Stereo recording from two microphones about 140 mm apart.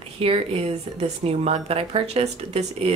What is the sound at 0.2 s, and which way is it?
Speech, 40° right (ahead or behind).